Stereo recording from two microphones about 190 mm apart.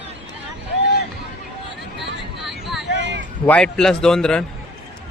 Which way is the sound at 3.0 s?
70° right (ahead or behind).